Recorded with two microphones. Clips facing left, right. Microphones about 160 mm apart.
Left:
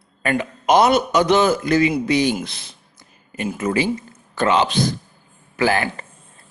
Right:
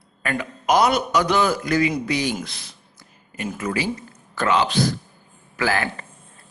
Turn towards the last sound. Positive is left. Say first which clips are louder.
# left 4 dB
turn(degrees=20)  # may be behind; listen again after turning